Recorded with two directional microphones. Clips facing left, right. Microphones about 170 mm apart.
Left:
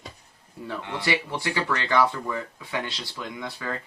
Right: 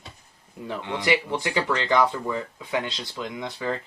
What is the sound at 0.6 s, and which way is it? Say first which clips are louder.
Speech: right 3 dB; 20° right (ahead or behind).